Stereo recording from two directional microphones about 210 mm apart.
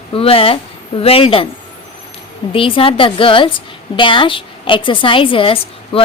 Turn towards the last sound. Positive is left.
turn(degrees=25)  # may be behind; listen again after turning